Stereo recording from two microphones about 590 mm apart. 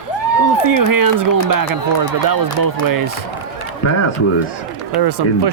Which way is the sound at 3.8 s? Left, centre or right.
Left.